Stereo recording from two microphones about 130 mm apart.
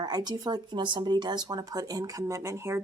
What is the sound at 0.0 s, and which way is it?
Speech, 30° right (ahead or behind).